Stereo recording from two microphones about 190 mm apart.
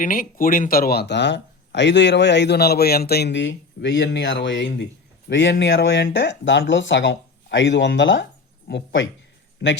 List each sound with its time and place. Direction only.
0.0 s a man's voice: 45° left (ahead or behind); by 9.8 s 70° left (ahead or behind)